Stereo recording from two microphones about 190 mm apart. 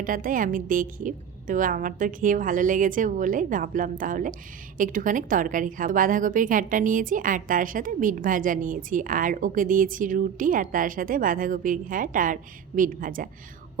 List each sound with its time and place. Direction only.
0.0 s a woman's voice: 45° right (ahead or behind)